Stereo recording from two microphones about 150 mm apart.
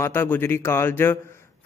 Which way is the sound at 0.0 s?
15° left (ahead or behind).